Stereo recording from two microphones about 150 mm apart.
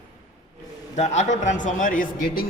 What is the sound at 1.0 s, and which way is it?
Speech, 50° left (ahead or behind).